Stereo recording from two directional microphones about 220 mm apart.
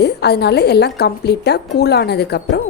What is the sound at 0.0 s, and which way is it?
A woman's voice, 50° left (ahead or behind).